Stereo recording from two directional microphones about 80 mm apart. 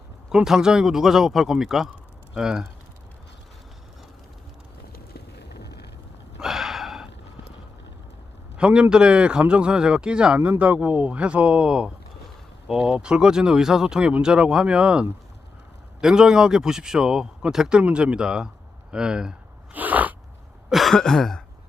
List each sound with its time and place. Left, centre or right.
0.3 s a man's voice: centre
6.4 s gasp: centre
8.5 s a man's voice: centre
19.7 s sneeze: right
20.7 s speech: centre